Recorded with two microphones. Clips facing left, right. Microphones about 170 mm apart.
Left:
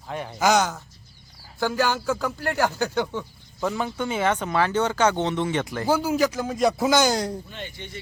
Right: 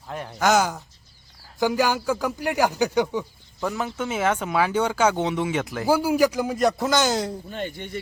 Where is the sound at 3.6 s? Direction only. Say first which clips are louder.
Left 1 dB; centre (ahead or behind).